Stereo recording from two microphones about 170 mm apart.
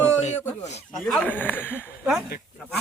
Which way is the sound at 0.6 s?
40° left (ahead or behind).